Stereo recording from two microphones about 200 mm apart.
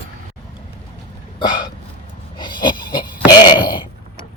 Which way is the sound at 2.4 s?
25° left (ahead or behind).